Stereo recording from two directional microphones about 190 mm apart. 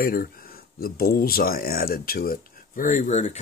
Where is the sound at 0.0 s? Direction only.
50° left (ahead or behind).